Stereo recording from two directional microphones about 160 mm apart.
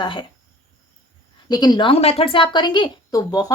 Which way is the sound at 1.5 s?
25° left (ahead or behind).